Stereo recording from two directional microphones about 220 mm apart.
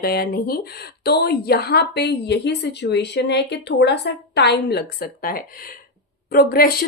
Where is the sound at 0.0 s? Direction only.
45° left (ahead or behind).